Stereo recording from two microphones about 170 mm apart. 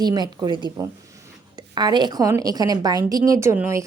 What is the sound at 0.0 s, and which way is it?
A woman's voice, 25° right (ahead or behind).